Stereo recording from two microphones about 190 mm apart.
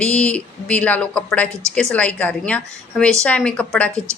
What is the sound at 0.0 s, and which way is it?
Speech, 5° left (ahead or behind).